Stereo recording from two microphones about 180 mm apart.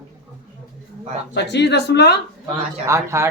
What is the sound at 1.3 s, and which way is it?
Speech, 70° left (ahead or behind).